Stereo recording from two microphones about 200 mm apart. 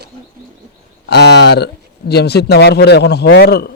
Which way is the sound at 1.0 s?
55° left (ahead or behind).